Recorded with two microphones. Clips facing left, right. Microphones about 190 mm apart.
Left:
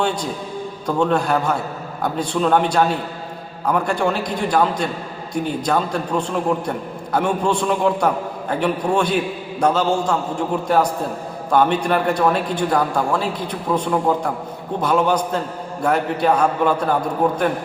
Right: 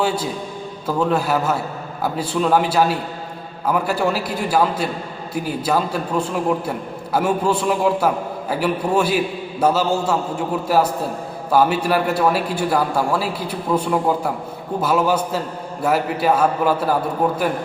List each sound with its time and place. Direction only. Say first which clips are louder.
0.9 s a man's voice: left 1 dB; 5° right (ahead or behind)